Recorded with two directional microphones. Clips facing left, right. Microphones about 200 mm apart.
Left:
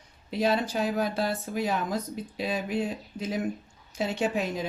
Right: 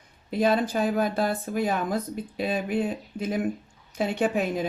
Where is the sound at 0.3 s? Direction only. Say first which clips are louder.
Right 3 dB; 50° right (ahead or behind).